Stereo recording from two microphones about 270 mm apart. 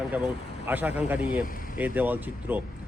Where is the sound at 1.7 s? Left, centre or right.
Centre.